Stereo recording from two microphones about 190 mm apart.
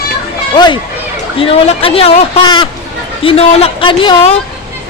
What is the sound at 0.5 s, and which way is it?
A man's voice, 25° left (ahead or behind).